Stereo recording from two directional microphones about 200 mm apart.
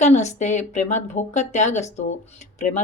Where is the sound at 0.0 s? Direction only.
35° left (ahead or behind).